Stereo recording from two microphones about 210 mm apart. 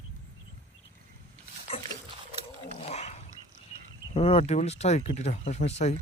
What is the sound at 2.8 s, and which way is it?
Dog, 30° left (ahead or behind).